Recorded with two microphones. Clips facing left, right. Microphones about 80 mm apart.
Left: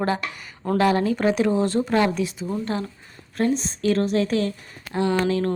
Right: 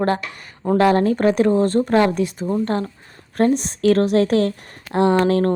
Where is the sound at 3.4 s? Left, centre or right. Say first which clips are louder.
Right 5 dB; right.